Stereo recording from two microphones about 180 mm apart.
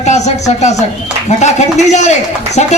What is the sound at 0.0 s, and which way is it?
A man's voice, 40° left (ahead or behind).